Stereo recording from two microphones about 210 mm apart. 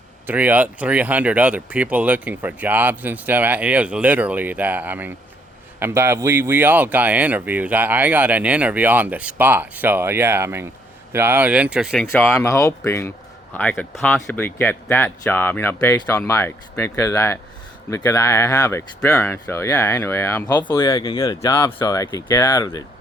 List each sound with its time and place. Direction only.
0.3 s speech: 10° right (ahead or behind)
12.2 s a man's voice: 10° left (ahead or behind)